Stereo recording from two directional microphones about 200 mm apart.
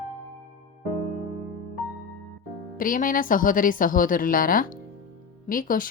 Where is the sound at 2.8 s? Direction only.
45° left (ahead or behind).